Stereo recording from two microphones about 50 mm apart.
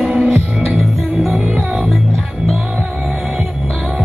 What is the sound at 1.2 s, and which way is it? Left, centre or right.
Music, centre.